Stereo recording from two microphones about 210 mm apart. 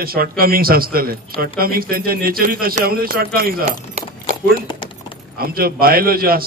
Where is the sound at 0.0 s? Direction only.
45° right (ahead or behind).